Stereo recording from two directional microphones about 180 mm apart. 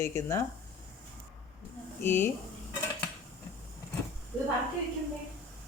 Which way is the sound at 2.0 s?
10° left (ahead or behind).